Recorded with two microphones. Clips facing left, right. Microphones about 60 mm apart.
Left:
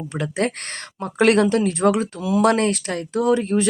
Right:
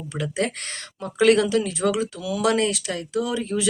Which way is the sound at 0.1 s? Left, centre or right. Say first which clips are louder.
Left 2 dB; left.